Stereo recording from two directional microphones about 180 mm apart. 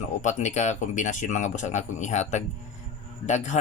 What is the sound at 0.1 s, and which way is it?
Speech, 40° left (ahead or behind).